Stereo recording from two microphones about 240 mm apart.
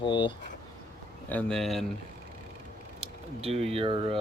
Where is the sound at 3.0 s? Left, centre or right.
Right.